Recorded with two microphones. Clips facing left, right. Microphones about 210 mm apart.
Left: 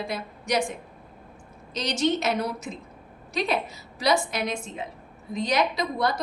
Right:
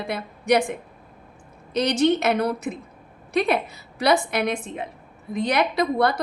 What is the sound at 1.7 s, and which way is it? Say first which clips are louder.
A woman's voice: right 6 dB; 60° right (ahead or behind).